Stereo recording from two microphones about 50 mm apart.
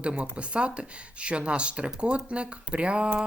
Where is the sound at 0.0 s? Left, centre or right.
Right.